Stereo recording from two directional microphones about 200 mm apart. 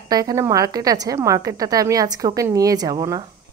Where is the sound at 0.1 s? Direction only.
20° right (ahead or behind).